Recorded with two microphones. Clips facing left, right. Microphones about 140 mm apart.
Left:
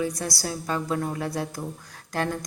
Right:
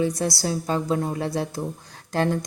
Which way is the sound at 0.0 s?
25° right (ahead or behind).